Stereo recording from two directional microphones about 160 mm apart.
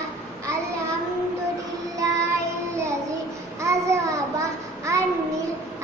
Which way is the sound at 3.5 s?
20° right (ahead or behind).